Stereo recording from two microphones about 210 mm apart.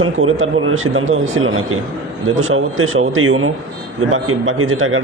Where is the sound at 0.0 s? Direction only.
75° right (ahead or behind).